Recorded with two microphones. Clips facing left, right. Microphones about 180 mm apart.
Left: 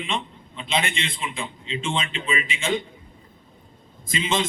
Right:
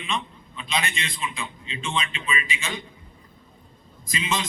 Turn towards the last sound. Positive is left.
turn(degrees=25)  # may be behind; listen again after turning